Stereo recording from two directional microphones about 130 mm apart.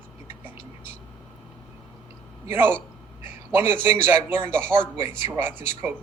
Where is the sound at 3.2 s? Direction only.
15° right (ahead or behind).